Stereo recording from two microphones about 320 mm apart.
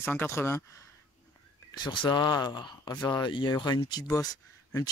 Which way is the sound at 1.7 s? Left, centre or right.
Centre.